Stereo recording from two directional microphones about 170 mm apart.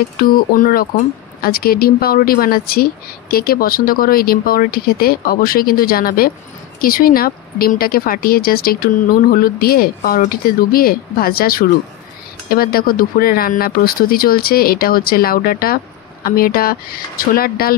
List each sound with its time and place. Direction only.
0.2 s speech: 55° left (ahead or behind)